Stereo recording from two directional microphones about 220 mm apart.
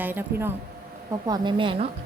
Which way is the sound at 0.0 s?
10° right (ahead or behind).